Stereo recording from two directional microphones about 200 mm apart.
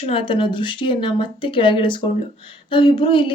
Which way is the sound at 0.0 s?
25° left (ahead or behind).